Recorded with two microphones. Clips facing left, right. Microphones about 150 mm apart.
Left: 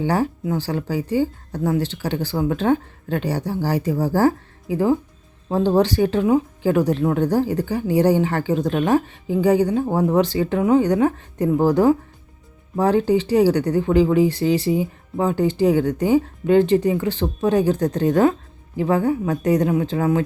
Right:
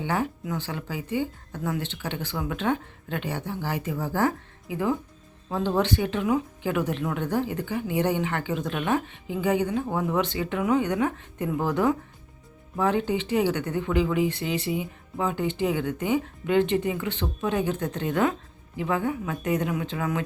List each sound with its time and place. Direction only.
0.0 s speech: 35° left (ahead or behind)